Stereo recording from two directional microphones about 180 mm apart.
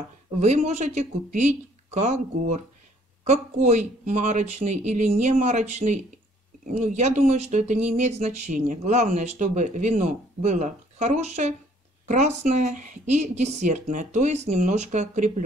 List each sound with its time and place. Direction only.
0.4 s speech: 40° right (ahead or behind)